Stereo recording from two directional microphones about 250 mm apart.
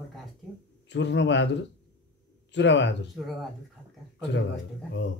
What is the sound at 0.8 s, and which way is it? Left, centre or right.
A man's voice, left.